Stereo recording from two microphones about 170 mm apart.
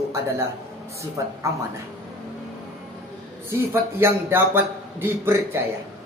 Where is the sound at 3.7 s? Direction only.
15° right (ahead or behind).